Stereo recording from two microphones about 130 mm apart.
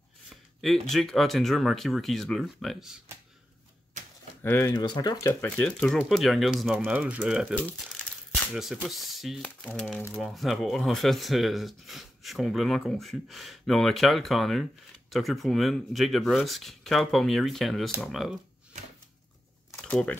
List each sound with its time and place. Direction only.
0.6 s speech: 5° left (ahead or behind)
3.9 s typewriter: 70° right (ahead or behind)
4.4 s speech: 15° left (ahead or behind)
4.6 s speech: 30° left (ahead or behind)
5.3 s speech: 15° left (ahead or behind); by 6.8 s centre (ahead or behind)
6.8 s speech: 10° right (ahead or behind)
19.8 s speech: 10° left (ahead or behind)